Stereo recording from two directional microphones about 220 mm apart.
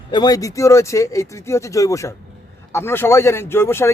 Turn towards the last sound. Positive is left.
turn(degrees=10)  # may be behind; listen again after turning